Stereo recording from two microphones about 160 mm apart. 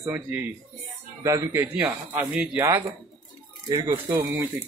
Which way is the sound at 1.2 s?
20° right (ahead or behind).